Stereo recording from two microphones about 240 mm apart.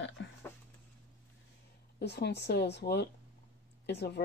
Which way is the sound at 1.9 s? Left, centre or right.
Left.